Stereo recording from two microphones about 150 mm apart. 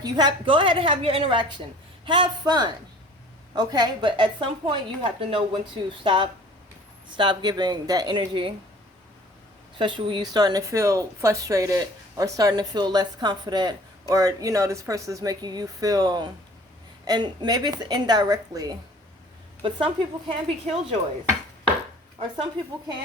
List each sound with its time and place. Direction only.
0.0 s a woman's voice: 30° right (ahead or behind)
9.7 s speech: 35° right (ahead or behind)
19.6 s a woman's voice: 40° right (ahead or behind)